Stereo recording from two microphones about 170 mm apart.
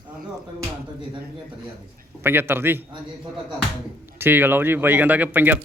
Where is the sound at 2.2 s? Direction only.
10° right (ahead or behind).